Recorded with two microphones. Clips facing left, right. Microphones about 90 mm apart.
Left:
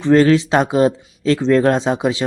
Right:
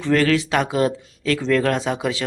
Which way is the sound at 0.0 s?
25° left (ahead or behind).